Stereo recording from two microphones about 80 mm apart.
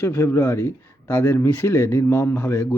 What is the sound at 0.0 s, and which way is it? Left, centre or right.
A man's voice, left.